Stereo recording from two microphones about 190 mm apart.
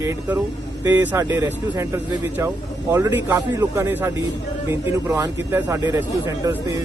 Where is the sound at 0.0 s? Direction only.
15° right (ahead or behind).